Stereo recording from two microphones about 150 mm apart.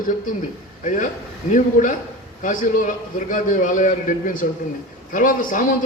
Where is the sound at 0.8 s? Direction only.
60° left (ahead or behind).